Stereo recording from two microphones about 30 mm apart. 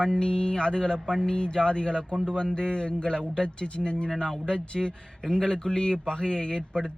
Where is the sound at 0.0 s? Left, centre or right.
Left.